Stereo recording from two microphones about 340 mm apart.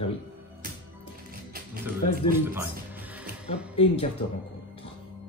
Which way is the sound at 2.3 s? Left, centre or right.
Centre.